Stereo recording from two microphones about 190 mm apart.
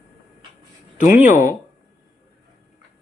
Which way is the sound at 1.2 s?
10° right (ahead or behind).